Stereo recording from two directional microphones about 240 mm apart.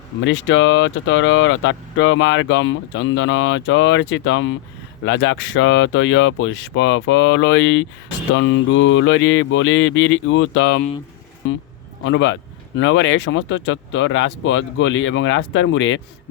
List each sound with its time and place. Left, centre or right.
0.3 s speech: left
12.0 s speech: left